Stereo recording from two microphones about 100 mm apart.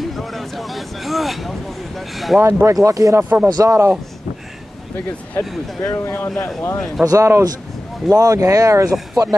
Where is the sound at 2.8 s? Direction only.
35° right (ahead or behind).